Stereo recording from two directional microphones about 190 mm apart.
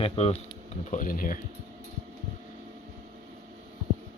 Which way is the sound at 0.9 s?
45° left (ahead or behind).